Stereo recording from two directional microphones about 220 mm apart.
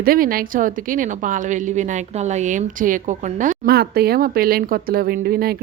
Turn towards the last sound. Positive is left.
turn(degrees=-45)  # may be behind; listen again after turning